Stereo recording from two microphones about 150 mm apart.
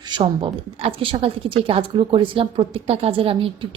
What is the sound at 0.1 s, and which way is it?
A woman's voice, 35° right (ahead or behind).